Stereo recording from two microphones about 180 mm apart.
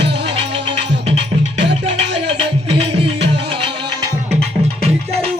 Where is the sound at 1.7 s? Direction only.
30° right (ahead or behind).